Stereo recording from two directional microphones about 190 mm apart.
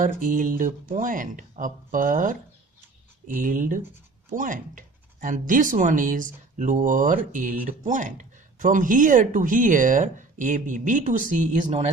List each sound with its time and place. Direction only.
0.0 s speech: 45° right (ahead or behind)